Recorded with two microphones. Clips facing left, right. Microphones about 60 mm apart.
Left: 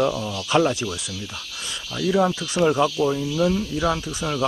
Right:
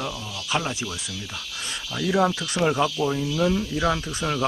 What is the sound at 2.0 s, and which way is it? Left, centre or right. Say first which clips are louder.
Speech: left 2 dB; right.